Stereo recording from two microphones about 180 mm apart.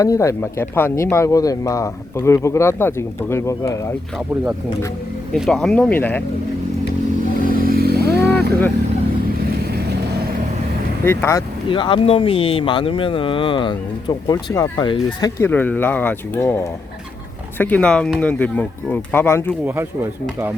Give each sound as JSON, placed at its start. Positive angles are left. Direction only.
{"t": 0.0, "sound": "a man's voice", "side_deg": 15}
{"t": 5.3, "sound": "speech", "side_deg": 5}
{"t": 7.4, "sound": "vehicle", "side_deg": -50}
{"t": 8.2, "sound": "vehicle", "side_deg": 10}
{"t": 11.0, "sound": "a man's voice", "side_deg": 15}
{"t": 11.7, "sound": "speech", "side_deg": 30}
{"t": 15.4, "sound": "a man's voice", "side_deg": 10}
{"t": 17.6, "sound": "a man's voice", "side_deg": 5}
{"t": 19.6, "sound": "speech", "side_deg": -15}